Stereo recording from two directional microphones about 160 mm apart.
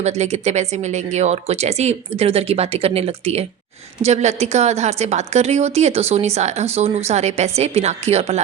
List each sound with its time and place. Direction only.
0.0 s a woman's voice: 45° right (ahead or behind)